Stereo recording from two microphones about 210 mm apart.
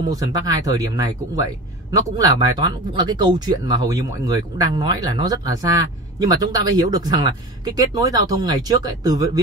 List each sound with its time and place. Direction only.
0.1 s a man's voice: 15° right (ahead or behind)